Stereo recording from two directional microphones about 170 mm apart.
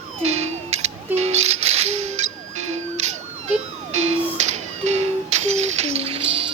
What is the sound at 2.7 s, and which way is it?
Emergency vehicle, 40° right (ahead or behind).